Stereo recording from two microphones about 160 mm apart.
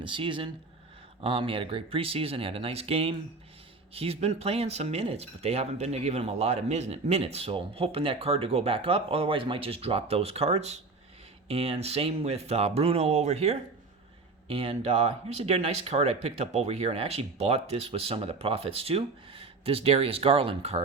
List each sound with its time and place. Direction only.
0.0 s speech: 30° right (ahead or behind)